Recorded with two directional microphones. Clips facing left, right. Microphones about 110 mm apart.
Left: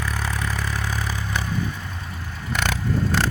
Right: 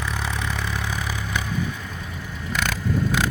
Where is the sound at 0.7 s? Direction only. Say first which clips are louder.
Even; 15° right (ahead or behind).